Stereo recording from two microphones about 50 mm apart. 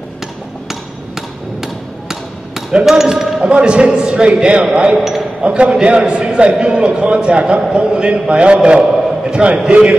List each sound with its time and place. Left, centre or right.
1.6 s hammer: centre
2.8 s speech: centre
3.4 s a man's voice: centre
4.9 s a man's voice: centre
5.4 s a man's voice: centre